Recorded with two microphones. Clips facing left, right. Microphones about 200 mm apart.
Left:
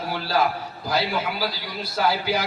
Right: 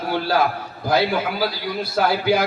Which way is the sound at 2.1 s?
55° right (ahead or behind).